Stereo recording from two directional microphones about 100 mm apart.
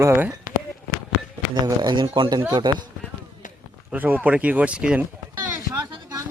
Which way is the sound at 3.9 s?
15° right (ahead or behind).